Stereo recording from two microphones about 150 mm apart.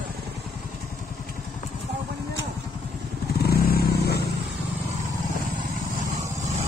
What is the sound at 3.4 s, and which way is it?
Vehicle, 90° left.